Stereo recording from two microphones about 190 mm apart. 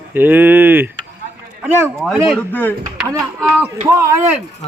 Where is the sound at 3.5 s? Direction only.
15° right (ahead or behind).